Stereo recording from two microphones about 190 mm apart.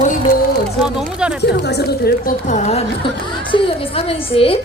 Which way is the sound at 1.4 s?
60° left (ahead or behind).